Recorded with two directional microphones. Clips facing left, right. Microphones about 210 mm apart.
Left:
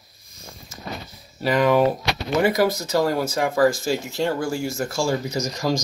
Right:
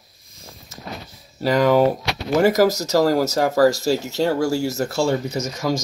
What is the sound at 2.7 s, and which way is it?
Speech, 40° right (ahead or behind).